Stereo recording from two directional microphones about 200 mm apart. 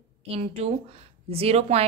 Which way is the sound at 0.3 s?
30° right (ahead or behind).